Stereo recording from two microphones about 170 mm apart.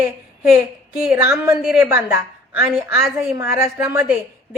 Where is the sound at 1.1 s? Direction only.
15° right (ahead or behind).